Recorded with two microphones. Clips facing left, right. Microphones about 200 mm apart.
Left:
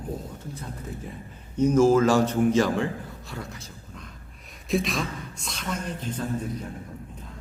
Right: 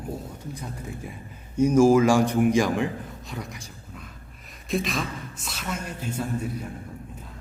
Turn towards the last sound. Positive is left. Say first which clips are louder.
# even
turn(degrees=-10)  # may be behind; listen again after turning